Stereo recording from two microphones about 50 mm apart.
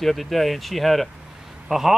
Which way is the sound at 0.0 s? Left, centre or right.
Centre.